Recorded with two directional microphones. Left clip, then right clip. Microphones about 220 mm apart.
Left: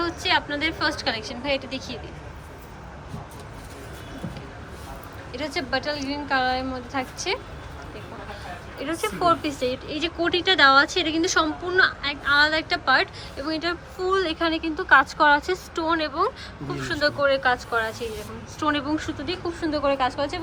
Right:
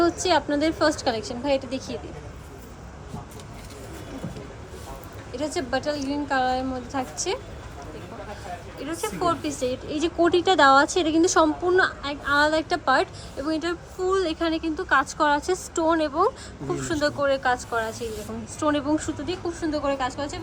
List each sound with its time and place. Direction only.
0.0 s a woman's voice: 25° right (ahead or behind)
5.3 s a woman's voice: 15° right (ahead or behind)
8.8 s a woman's voice: centre (ahead or behind)